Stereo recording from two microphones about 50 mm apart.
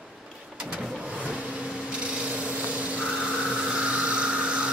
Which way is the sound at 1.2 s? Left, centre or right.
Centre.